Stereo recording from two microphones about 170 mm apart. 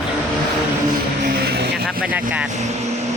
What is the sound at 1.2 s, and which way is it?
Vehicle, 65° right (ahead or behind).